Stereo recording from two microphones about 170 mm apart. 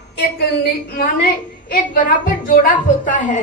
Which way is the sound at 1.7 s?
55° left (ahead or behind).